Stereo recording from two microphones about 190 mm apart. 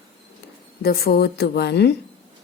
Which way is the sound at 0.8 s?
55° left (ahead or behind).